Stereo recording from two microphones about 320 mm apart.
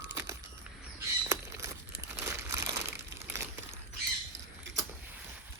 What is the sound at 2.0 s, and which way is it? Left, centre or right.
Crumpling, centre.